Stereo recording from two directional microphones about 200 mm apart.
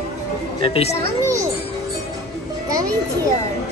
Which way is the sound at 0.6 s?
30° left (ahead or behind).